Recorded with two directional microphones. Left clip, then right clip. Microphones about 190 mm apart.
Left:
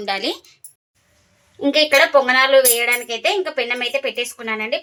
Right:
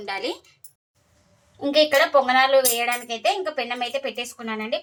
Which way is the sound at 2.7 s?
40° left (ahead or behind).